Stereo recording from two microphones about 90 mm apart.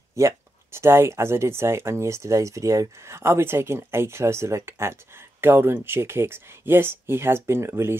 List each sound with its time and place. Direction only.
0.2 s speech: 35° right (ahead or behind)